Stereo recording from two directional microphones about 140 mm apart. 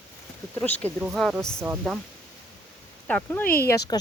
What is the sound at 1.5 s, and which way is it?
Speech, 10° right (ahead or behind).